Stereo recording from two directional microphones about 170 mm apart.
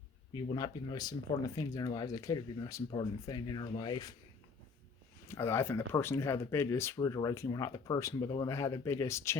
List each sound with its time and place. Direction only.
0.5 s speech: 20° left (ahead or behind)
5.3 s speech: 15° left (ahead or behind)